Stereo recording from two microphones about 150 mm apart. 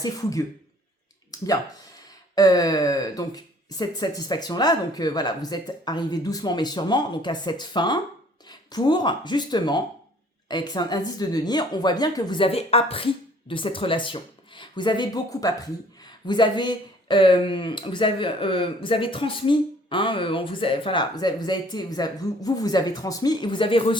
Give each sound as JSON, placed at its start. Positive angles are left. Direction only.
{"t": 0.0, "sound": "speech", "side_deg": 25}
{"t": 1.3, "sound": "a sound", "side_deg": 25}
{"t": 2.3, "sound": "speech", "side_deg": 25}